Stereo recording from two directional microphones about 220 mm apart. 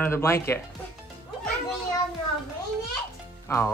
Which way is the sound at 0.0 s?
10° left (ahead or behind).